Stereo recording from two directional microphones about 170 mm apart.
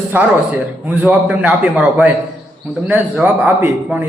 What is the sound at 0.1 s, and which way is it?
A man's voice, 10° right (ahead or behind).